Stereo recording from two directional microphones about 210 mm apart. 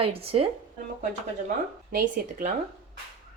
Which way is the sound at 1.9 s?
45° right (ahead or behind).